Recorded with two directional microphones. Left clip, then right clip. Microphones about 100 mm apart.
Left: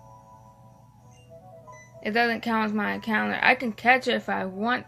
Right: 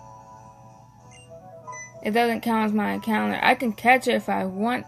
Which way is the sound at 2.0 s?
90° right.